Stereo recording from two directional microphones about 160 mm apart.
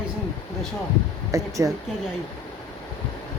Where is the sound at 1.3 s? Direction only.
20° right (ahead or behind).